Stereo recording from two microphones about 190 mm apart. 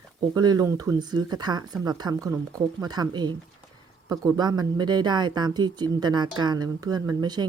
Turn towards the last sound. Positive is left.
turn(degrees=-20)  # may be behind; listen again after turning